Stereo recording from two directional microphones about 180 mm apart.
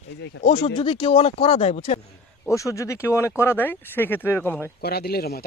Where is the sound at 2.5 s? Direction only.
15° left (ahead or behind).